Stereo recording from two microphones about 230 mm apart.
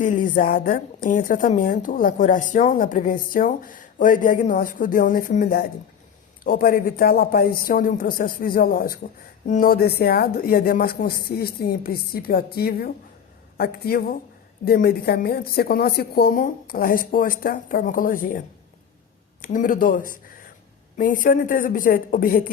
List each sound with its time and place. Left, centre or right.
0.0 s speech: left